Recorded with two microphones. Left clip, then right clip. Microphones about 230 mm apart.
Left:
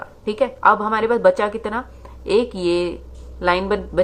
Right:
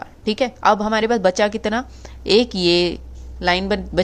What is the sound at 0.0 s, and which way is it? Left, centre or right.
A woman's voice, right.